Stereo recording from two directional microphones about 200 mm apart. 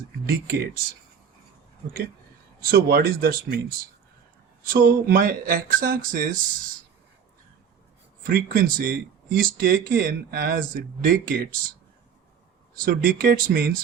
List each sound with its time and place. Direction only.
0.3 s speech: 50° right (ahead or behind)
2.6 s speech: 50° right (ahead or behind)
4.6 s speech: 45° right (ahead or behind)
8.3 s speech: 45° right (ahead or behind)
12.8 s speech: 45° right (ahead or behind)